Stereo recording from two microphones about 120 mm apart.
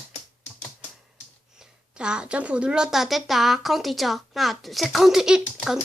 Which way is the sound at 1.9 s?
5° right (ahead or behind).